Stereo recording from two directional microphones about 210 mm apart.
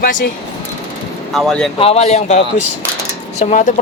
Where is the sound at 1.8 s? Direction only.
30° left (ahead or behind).